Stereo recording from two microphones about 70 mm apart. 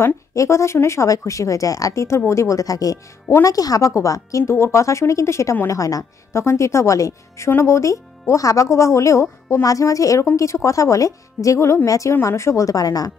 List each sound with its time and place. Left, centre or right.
0.0 s speech: left
5.7 s speech: left